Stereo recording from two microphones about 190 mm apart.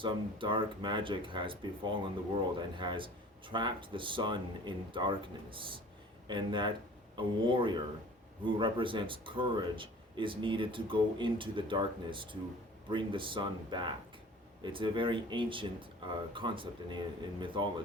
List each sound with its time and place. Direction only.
0.0 s speech: 25° right (ahead or behind)